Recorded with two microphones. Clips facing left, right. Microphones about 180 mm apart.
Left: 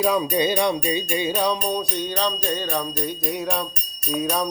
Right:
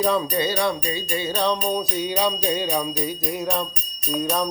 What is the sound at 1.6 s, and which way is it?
Jingle bell, 5° right (ahead or behind).